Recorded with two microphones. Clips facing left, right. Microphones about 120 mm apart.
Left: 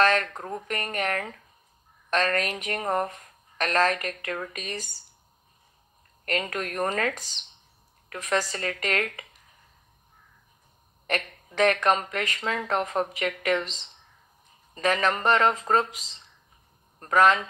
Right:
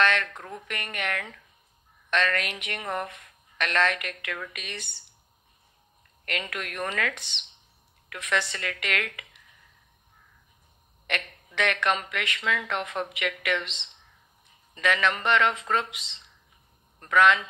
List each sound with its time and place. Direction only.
0.0 s a woman's voice: 40° left (ahead or behind)
6.2 s a woman's voice: 40° left (ahead or behind)
11.1 s a woman's voice: 40° left (ahead or behind)